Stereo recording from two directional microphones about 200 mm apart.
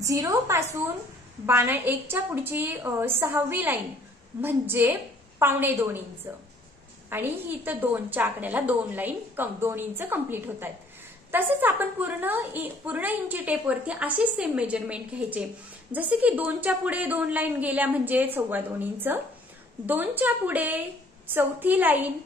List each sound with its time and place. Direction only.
0.0 s a woman's voice: 15° right (ahead or behind)